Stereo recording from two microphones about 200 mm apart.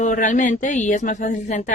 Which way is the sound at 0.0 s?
40° left (ahead or behind).